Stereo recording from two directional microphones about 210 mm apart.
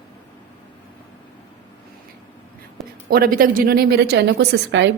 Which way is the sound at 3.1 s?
45° right (ahead or behind).